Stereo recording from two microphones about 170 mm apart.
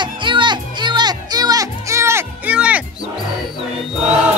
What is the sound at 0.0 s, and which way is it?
Music, 30° right (ahead or behind).